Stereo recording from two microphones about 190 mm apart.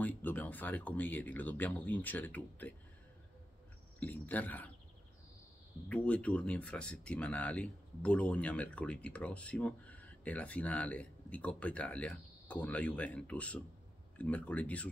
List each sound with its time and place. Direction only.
0.0 s speech: 10° left (ahead or behind)
4.0 s speech: 10° left (ahead or behind)
5.9 s speech: 5° left (ahead or behind)